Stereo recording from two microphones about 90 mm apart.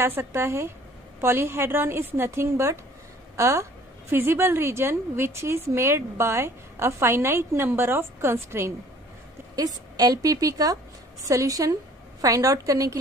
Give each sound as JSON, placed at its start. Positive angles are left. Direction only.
{"t": 0.0, "sound": "a woman's voice", "side_deg": -30}
{"t": 9.6, "sound": "a woman's voice", "side_deg": -45}